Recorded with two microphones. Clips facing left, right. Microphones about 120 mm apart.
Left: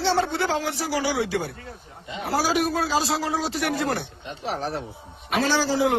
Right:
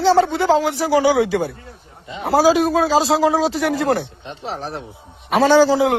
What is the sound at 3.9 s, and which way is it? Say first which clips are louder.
Speech: right 8 dB; 30° right (ahead or behind).